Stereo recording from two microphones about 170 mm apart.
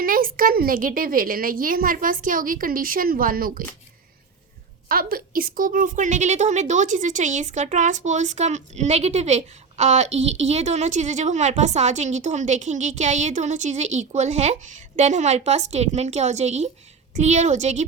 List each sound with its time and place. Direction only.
0.0 s a woman's voice: 55° right (ahead or behind)
4.9 s a woman's voice: 60° right (ahead or behind); by 17.8 s 40° right (ahead or behind)